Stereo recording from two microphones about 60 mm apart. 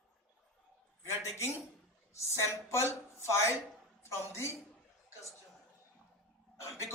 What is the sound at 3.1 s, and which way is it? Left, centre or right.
Speech, left.